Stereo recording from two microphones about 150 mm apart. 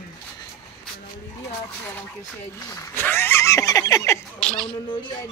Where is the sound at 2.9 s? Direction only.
15° left (ahead or behind).